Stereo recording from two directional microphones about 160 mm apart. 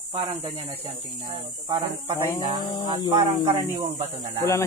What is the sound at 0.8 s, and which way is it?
Speech, 30° right (ahead or behind).